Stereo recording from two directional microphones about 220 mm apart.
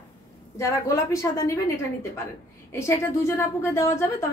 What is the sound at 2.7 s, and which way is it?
A woman's voice, 10° left (ahead or behind).